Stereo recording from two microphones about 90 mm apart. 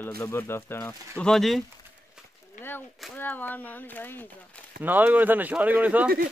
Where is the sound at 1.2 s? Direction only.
5° left (ahead or behind).